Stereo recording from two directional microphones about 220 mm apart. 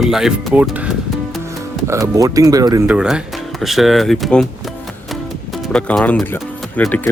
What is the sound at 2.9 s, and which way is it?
Speech, 5° right (ahead or behind).